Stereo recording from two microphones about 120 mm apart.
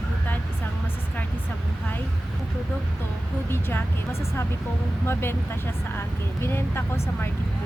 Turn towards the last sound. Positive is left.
turn(degrees=20)  # may be behind; listen again after turning